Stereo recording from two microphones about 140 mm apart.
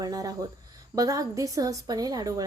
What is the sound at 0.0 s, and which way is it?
A woman's voice, 25° right (ahead or behind).